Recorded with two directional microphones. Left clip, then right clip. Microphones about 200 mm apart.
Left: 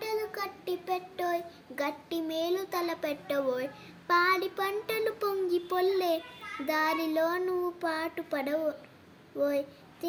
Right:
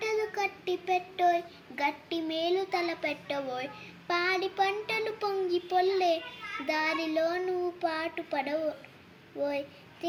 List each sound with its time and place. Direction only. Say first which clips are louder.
0.0 s child singing: right 3 dB; 35° left (ahead or behind)